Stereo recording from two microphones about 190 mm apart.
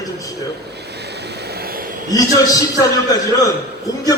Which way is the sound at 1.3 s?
55° right (ahead or behind).